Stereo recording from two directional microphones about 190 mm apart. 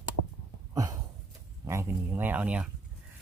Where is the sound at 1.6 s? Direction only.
15° right (ahead or behind).